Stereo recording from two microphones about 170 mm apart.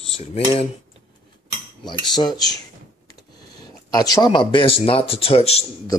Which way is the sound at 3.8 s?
20° left (ahead or behind).